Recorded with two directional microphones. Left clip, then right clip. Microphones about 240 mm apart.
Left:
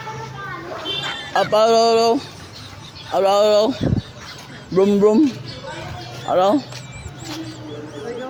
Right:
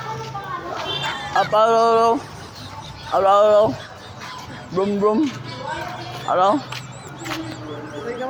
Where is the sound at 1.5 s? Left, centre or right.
Left.